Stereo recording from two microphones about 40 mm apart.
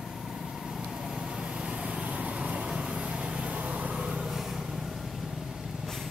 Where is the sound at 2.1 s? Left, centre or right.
Right.